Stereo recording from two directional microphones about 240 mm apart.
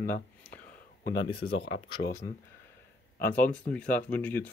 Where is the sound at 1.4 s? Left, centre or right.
Left.